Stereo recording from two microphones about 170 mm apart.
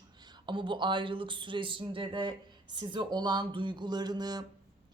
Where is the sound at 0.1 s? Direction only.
25° right (ahead or behind).